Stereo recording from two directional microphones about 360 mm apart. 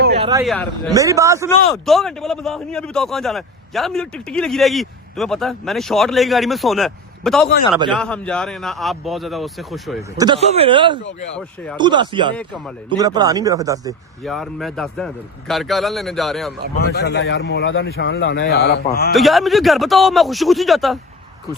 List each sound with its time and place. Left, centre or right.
0.3 s speech: centre
0.5 s a man's voice: centre
0.9 s a man's voice: centre
10.2 s speech: centre
11.3 s a man's voice: centre
11.8 s speech: centre
12.4 s a man's voice: centre
12.9 s a man's voice: centre
16.9 s a man's voice: left
19.1 s a man's voice: centre